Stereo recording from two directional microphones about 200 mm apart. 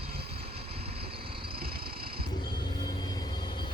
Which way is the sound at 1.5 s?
50° right (ahead or behind).